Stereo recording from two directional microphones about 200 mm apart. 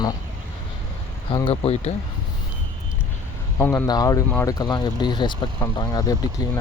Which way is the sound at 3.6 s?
10° left (ahead or behind).